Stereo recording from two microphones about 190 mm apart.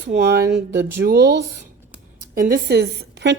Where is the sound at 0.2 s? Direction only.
60° right (ahead or behind).